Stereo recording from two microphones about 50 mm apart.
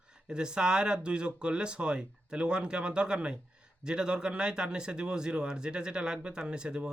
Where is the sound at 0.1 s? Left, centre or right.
Centre.